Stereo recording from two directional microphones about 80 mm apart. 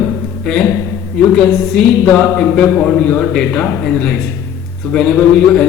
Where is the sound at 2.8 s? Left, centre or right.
Centre.